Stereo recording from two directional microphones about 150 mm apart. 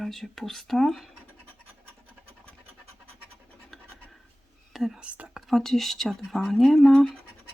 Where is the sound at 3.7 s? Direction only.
Centre (ahead or behind).